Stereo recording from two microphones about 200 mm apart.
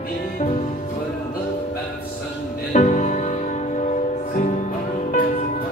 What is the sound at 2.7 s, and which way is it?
Music, 35° left (ahead or behind).